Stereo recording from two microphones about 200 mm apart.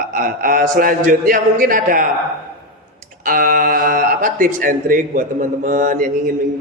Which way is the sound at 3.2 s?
45° right (ahead or behind).